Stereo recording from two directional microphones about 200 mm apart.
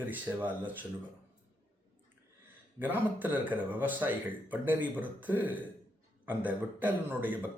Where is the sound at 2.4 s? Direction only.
10° right (ahead or behind).